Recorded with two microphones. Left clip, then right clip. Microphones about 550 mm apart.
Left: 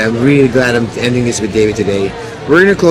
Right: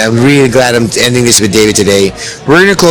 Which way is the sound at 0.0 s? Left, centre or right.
Right.